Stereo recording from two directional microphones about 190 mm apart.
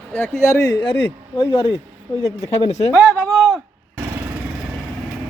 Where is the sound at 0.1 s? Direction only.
15° left (ahead or behind); by 2.9 s 35° left (ahead or behind).